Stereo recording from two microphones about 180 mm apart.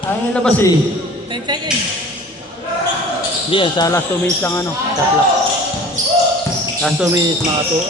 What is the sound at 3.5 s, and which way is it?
Speech, 25° left (ahead or behind).